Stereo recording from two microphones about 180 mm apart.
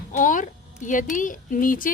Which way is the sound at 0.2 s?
45° left (ahead or behind).